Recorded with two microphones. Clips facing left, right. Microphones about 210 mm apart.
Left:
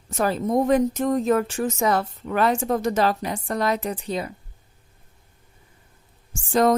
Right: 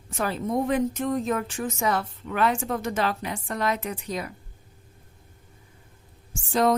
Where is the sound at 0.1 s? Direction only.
40° left (ahead or behind).